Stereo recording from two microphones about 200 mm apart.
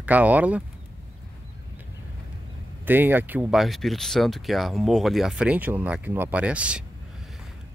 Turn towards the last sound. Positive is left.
turn(degrees=-5)  # may be behind; listen again after turning